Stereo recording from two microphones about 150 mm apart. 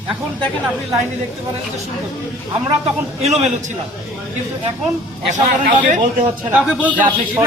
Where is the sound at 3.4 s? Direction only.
50° right (ahead or behind).